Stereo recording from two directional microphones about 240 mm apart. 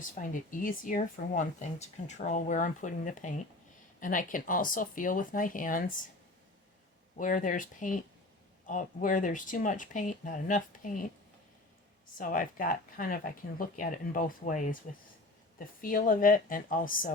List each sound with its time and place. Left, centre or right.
0.2 s speech: left
7.2 s speech: left
12.1 s speech: left